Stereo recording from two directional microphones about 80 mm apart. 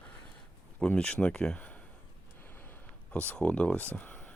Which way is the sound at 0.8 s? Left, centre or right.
Centre.